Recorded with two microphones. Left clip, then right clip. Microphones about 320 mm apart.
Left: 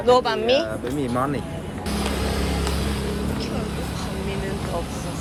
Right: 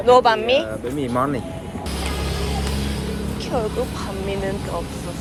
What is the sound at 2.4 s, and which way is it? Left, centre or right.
Music, left.